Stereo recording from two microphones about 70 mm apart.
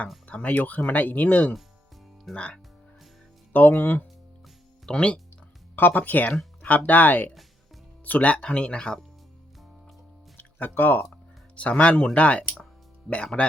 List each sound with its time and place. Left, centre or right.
0.3 s speech: left
3.8 s speech: left
4.9 s speech: centre
5.7 s speech: left
10.3 s speech: left